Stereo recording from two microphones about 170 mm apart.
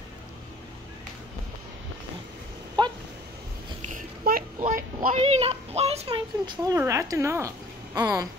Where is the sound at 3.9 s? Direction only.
55° right (ahead or behind).